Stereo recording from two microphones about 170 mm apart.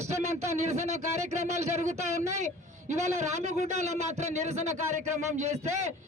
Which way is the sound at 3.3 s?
40° right (ahead or behind).